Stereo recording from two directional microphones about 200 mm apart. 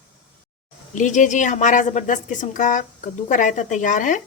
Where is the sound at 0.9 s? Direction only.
40° left (ahead or behind).